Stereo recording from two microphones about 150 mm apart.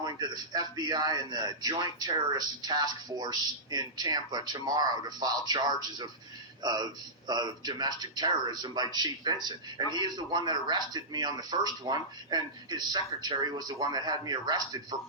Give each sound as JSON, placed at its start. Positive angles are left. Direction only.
{"t": 0.0, "sound": "a man's voice", "side_deg": -25}